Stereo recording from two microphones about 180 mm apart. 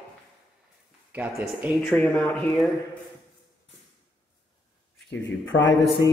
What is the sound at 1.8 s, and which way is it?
Speech, 5° left (ahead or behind).